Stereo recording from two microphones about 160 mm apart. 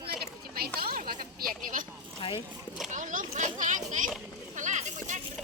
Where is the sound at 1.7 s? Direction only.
60° right (ahead or behind).